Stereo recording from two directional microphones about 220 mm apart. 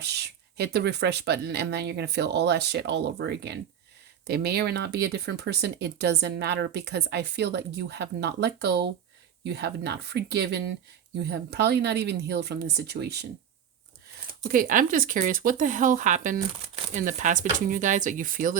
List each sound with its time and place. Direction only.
0.0 s speech: 50° right (ahead or behind)
14.4 s speech: 40° right (ahead or behind)